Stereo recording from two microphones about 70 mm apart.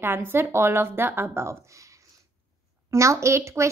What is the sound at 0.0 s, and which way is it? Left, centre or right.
A woman's voice, right.